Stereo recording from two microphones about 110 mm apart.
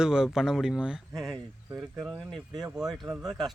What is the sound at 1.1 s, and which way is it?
Speech, 5° left (ahead or behind).